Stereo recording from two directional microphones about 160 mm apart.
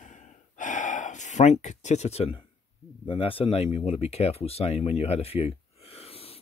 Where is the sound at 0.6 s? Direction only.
50° left (ahead or behind).